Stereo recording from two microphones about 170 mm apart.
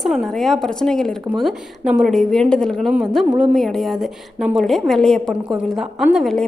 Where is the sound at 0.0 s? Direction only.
Centre (ahead or behind).